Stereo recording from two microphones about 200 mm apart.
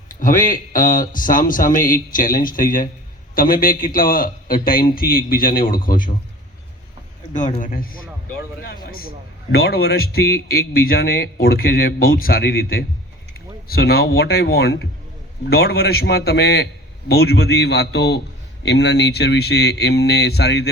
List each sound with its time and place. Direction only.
0.3 s a man's voice: 40° left (ahead or behind)
7.6 s a man's voice: 45° left (ahead or behind)